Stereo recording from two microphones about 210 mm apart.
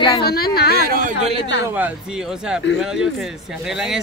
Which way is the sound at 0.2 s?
50° left (ahead or behind).